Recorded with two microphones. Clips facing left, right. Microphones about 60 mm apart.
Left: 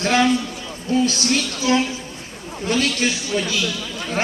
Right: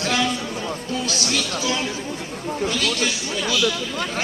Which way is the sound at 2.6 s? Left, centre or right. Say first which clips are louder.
Left 5 dB; left.